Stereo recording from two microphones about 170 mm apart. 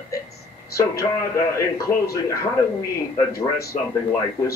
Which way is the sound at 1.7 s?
20° left (ahead or behind).